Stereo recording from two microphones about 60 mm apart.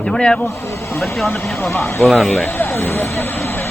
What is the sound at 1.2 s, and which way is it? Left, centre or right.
Speech, left.